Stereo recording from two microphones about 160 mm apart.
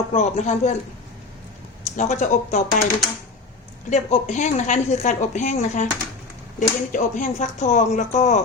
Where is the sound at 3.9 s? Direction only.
45° left (ahead or behind).